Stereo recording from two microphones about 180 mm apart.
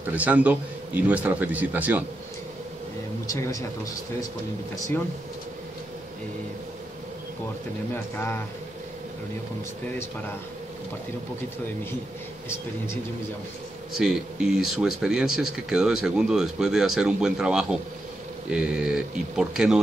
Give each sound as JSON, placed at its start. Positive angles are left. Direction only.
{"t": 0.0, "sound": "speech", "side_deg": -10}
{"t": 3.3, "sound": "speech", "side_deg": 20}
{"t": 7.9, "sound": "speech", "side_deg": 15}
{"t": 13.9, "sound": "speech", "side_deg": 0}